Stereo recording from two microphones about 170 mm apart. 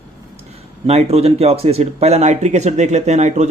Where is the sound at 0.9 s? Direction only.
35° right (ahead or behind).